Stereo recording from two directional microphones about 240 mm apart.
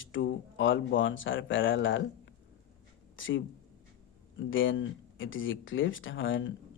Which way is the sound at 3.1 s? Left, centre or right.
Left.